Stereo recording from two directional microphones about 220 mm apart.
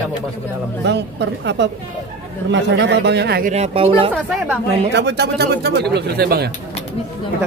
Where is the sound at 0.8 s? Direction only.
50° right (ahead or behind).